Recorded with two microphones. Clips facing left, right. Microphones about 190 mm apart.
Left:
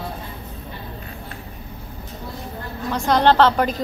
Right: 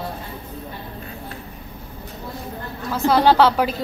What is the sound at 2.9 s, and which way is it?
Speech, 5° right (ahead or behind).